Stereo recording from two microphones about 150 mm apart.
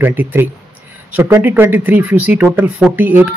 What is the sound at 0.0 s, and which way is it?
Speech, 15° right (ahead or behind).